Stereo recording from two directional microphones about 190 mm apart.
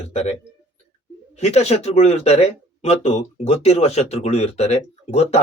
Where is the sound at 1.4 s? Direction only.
35° left (ahead or behind).